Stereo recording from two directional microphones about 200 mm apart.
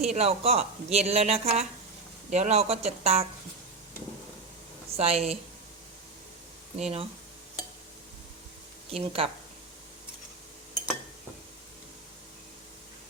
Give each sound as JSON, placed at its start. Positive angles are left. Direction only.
{"t": 0.0, "sound": "a woman's voice", "side_deg": -30}
{"t": 4.9, "sound": "a woman's voice", "side_deg": -30}
{"t": 6.7, "sound": "a woman's voice", "side_deg": -30}
{"t": 8.9, "sound": "speech", "side_deg": -30}